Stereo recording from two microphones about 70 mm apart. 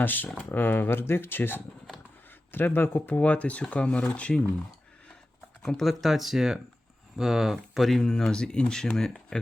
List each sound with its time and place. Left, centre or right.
0.0 s speech: left
5.6 s speech: centre